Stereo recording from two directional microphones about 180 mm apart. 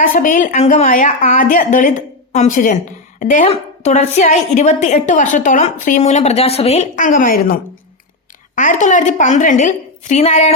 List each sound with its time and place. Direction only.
0.0 s a woman's voice: 50° left (ahead or behind)